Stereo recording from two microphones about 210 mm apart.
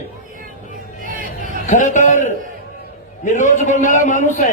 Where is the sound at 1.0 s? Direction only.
40° right (ahead or behind).